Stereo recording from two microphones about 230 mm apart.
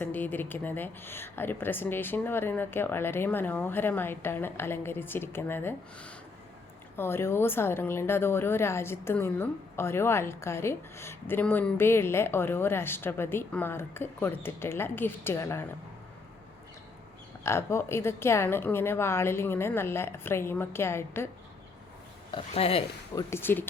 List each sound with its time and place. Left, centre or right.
0.0 s a woman's voice: centre
17.4 s a woman's voice: centre
22.3 s speech: left
23.3 s a woman's voice: centre